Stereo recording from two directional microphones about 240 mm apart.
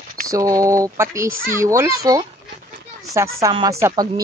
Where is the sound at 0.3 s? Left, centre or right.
Centre.